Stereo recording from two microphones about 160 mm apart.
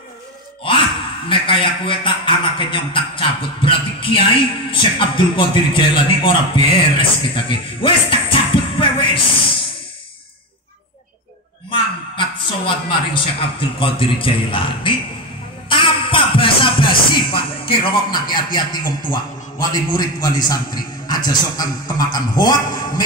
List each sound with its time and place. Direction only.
1.3 s a man's voice: 30° left (ahead or behind)
11.7 s a woman's voice: 30° left (ahead or behind)
15.7 s music: 30° left (ahead or behind)
17.3 s a man's voice: 30° left (ahead or behind)